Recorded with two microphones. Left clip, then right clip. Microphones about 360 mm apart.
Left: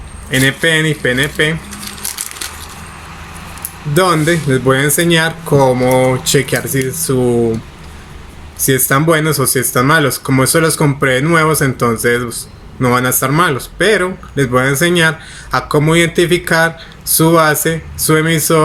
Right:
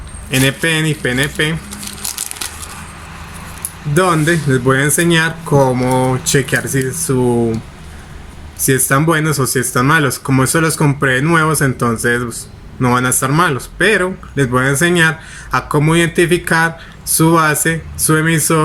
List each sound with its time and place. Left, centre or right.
0.3 s speech: centre
3.9 s speech: centre
8.5 s speech: centre